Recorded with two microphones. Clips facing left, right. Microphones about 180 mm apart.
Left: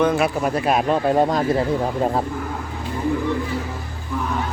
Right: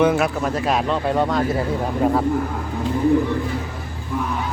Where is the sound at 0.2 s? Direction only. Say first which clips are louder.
Left 1 dB; 10° left (ahead or behind).